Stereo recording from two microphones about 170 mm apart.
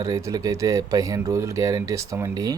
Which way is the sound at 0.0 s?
20° right (ahead or behind).